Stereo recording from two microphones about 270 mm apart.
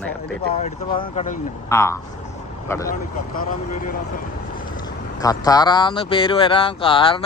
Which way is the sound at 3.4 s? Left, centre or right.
Left.